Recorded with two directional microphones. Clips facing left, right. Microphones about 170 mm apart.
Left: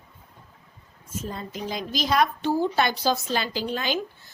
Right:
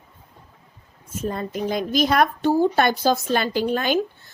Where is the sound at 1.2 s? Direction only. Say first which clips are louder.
Right 8 dB; 55° right (ahead or behind).